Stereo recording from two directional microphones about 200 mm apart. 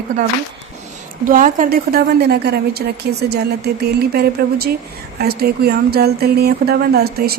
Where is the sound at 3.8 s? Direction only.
50° right (ahead or behind).